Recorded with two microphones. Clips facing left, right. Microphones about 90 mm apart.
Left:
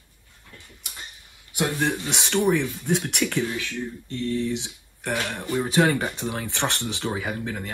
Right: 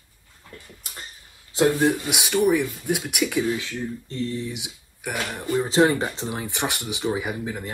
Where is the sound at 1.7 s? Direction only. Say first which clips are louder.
Right 4 dB; 10° right (ahead or behind).